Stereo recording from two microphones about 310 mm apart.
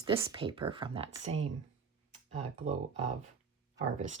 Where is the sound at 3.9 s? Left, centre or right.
Right.